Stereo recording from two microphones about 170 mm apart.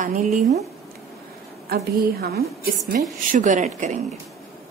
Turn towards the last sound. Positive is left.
turn(degrees=-45)  # may be behind; listen again after turning